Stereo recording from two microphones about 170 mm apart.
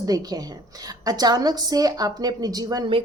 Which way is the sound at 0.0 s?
20° right (ahead or behind).